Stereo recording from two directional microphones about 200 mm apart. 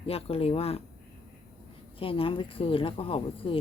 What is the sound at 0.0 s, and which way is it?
Speech, 30° left (ahead or behind).